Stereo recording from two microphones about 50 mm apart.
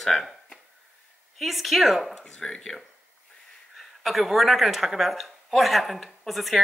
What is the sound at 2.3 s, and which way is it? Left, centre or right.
Speech, centre.